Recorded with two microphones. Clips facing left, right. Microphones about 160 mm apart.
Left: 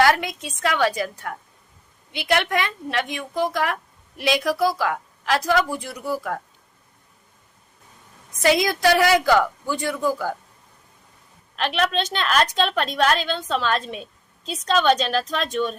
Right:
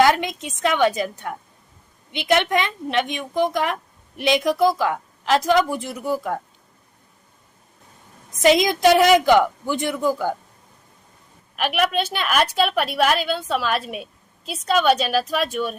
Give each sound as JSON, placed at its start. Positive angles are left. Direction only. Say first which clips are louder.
{"t": 0.0, "sound": "a woman's voice", "louder": "right 2 dB", "side_deg": -20}
{"t": 8.4, "sound": "a woman's voice", "louder": "right 3 dB", "side_deg": -20}
{"t": 11.5, "sound": "a woman's voice", "louder": "right 1 dB", "side_deg": -10}